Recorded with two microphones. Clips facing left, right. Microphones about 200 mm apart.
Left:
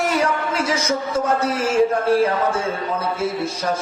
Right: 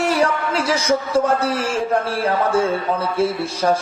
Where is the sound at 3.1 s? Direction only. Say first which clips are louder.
Right 3 dB; 30° right (ahead or behind).